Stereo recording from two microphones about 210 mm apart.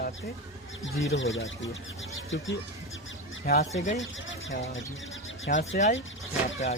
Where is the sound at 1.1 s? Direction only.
65° left (ahead or behind).